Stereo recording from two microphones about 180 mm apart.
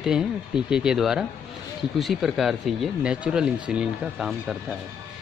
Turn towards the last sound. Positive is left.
turn(degrees=0)  # may be behind; listen again after turning